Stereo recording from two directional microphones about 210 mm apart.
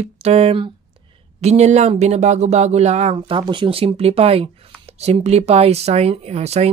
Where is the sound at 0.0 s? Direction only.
30° right (ahead or behind).